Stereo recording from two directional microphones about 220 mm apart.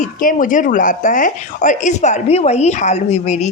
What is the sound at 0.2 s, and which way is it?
A woman's voice, 40° left (ahead or behind).